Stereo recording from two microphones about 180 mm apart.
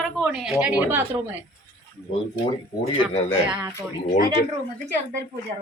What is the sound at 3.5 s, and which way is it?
Speech, 5° right (ahead or behind).